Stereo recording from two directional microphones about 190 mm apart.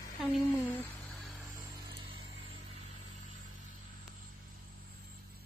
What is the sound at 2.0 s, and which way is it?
Vehicle, 25° right (ahead or behind).